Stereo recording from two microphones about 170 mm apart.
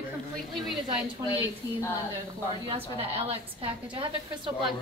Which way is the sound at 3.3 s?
30° right (ahead or behind).